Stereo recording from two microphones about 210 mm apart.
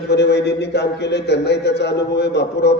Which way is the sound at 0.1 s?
55° left (ahead or behind).